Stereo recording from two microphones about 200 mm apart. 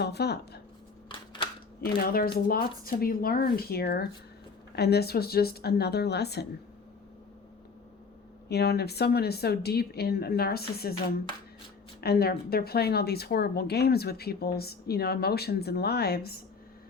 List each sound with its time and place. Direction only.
0.0 s speech: 55° left (ahead or behind)
1.0 s a sound: 25° left (ahead or behind)
1.8 s speech: 50° left (ahead or behind)
8.4 s speech: 55° left (ahead or behind)
11.9 s speech: 50° left (ahead or behind)